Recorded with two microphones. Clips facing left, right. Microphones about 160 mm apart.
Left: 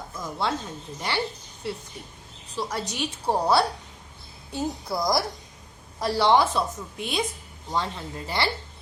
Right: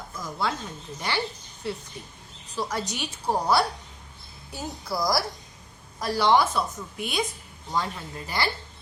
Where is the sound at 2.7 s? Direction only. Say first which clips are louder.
Left 1 dB; 30° left (ahead or behind).